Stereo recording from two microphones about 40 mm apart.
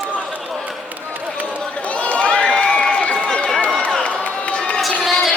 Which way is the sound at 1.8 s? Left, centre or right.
Left.